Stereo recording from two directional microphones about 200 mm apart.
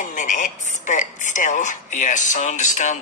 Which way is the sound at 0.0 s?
40° left (ahead or behind).